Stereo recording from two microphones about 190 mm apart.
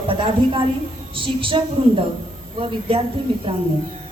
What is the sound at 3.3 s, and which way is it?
Speech, 30° right (ahead or behind).